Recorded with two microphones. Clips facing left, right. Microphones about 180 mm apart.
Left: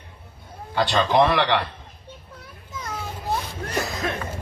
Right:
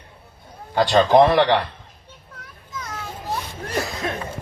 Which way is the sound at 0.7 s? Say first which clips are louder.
Right 5 dB; 50° right (ahead or behind).